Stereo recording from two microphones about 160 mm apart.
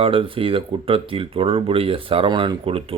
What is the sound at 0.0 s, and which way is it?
Speech, 35° right (ahead or behind).